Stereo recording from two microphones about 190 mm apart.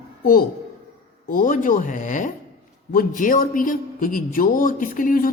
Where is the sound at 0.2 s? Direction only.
50° left (ahead or behind).